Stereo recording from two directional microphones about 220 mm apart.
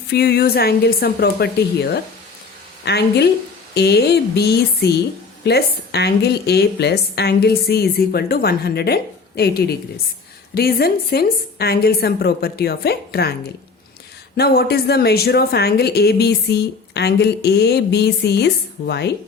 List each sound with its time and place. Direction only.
0.1 s speech: 45° left (ahead or behind)